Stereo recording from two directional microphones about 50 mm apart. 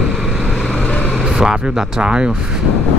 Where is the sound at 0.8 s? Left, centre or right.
Left.